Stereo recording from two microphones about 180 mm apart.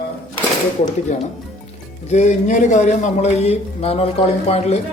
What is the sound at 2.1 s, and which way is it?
A man's voice, 40° left (ahead or behind).